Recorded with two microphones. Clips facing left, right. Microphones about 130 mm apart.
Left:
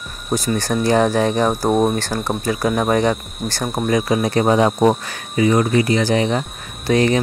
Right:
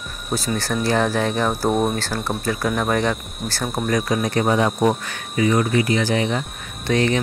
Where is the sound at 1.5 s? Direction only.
15° left (ahead or behind).